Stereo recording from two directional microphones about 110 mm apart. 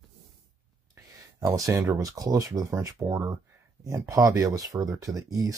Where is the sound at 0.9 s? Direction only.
30° right (ahead or behind).